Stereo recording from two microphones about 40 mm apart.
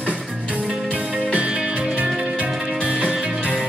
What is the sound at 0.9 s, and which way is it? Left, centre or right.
Music, right.